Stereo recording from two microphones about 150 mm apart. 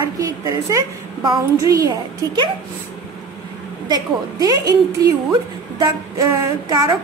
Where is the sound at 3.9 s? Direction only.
25° right (ahead or behind).